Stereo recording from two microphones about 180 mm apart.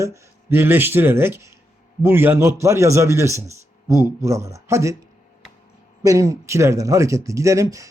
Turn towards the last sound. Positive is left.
turn(degrees=-20)  # may be behind; listen again after turning